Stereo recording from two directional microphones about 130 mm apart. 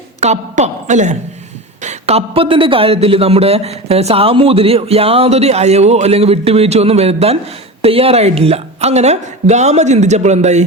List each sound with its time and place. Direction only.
0.2 s a woman's voice: 60° right (ahead or behind)